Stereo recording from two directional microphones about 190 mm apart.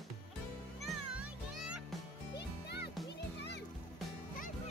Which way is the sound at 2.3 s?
60° left (ahead or behind).